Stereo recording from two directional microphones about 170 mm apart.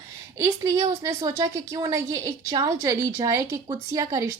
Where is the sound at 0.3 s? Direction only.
20° right (ahead or behind).